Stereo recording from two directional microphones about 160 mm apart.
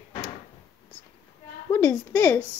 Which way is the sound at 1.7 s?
15° left (ahead or behind).